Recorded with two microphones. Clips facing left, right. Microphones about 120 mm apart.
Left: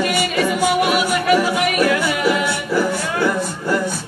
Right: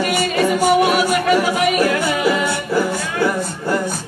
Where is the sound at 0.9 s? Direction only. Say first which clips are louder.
Right 1 dB; 35° right (ahead or behind).